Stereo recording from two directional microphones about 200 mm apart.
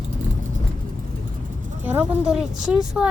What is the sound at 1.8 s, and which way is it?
Speech, 10° right (ahead or behind).